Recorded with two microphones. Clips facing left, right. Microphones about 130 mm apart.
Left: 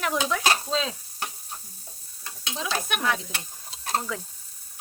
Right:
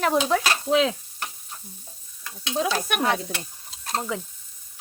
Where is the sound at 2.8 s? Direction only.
50° right (ahead or behind).